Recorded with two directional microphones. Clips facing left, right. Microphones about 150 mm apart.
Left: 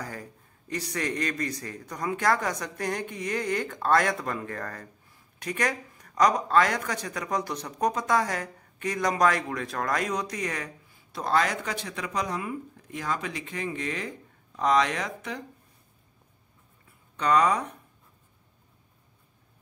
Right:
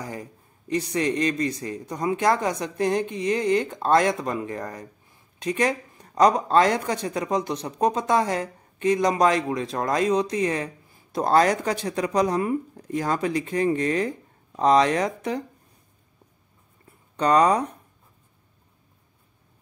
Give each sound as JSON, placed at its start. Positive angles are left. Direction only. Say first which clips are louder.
{"t": 0.0, "sound": "speech", "louder": "right 4 dB", "side_deg": -20}
{"t": 11.1, "sound": "speech", "louder": "right 7 dB", "side_deg": -40}
{"t": 17.2, "sound": "speech", "louder": "right 4 dB", "side_deg": -35}